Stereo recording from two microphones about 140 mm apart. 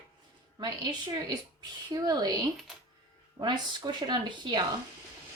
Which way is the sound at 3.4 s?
35° right (ahead or behind).